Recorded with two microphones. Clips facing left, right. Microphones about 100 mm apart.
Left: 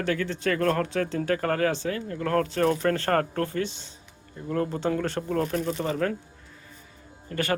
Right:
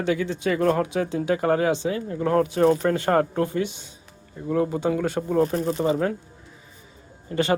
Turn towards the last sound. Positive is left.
turn(degrees=-20)  # may be behind; listen again after turning